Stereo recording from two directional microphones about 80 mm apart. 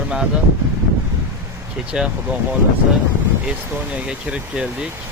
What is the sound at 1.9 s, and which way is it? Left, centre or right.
Speech, centre.